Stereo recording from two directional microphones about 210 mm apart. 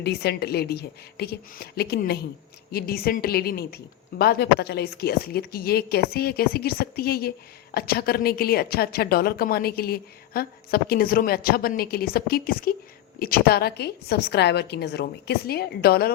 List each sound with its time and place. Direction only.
0.0 s a woman's voice: 50° left (ahead or behind)